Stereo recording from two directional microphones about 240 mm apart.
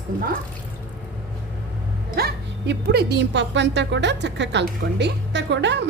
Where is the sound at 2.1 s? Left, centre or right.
Right.